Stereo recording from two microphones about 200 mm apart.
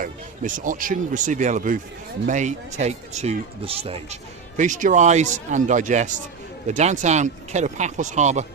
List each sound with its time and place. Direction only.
0.0 s speech: 40° right (ahead or behind)